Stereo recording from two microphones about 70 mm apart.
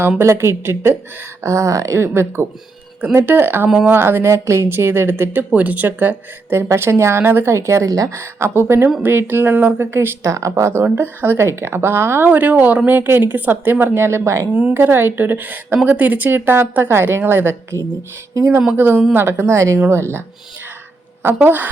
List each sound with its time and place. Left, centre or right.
0.2 s speech: right
1.5 s a woman's voice: right
2.0 s a woman's voice: right
8.1 s speech: right
10.2 s a woman's voice: right
10.8 s speech: right
12.3 s speech: right
14.7 s speech: right
18.8 s speech: right
19.5 s a woman's voice: right
21.4 s speech: right